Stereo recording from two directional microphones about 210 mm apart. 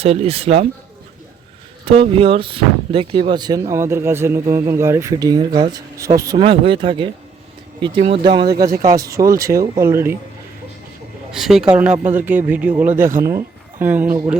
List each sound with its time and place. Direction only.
0.0 s speech: 30° right (ahead or behind)
1.8 s speech: 25° right (ahead or behind); by 10.2 s 10° right (ahead or behind)
11.3 s speech: centre (ahead or behind)
12.9 s speech: 40° right (ahead or behind)
13.2 s speech: 10° right (ahead or behind)